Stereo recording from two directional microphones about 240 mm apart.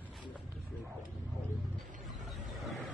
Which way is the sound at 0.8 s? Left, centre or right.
Centre.